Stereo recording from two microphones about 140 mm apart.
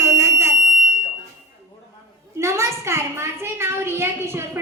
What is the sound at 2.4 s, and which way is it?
A woman's voice, 20° right (ahead or behind).